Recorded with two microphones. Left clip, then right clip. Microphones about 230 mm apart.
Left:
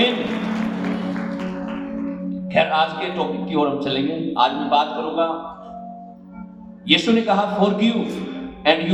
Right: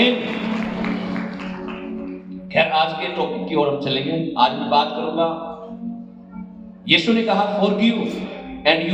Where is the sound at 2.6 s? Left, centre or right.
Left.